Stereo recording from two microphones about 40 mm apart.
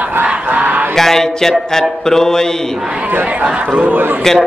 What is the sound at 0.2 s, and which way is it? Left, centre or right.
Music, right.